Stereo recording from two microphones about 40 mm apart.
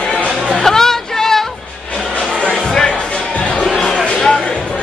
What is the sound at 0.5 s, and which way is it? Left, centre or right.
Music, centre.